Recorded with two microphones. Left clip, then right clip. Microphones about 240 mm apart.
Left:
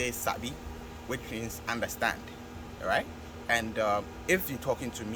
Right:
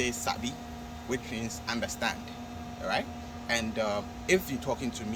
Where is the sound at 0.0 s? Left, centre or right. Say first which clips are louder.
Right 1 dB; centre.